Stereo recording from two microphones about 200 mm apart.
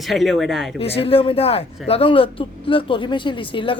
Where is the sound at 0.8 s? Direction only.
30° left (ahead or behind).